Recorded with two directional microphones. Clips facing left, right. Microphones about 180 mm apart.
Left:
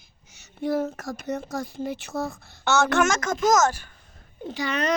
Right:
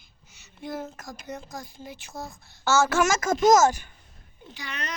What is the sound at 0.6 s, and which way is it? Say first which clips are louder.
Speech: left 9 dB; 65° left (ahead or behind).